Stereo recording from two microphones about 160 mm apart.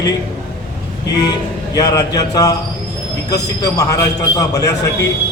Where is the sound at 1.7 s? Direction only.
25° left (ahead or behind).